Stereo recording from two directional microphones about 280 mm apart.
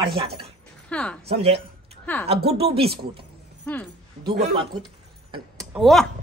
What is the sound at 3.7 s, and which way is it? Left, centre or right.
Speech, centre.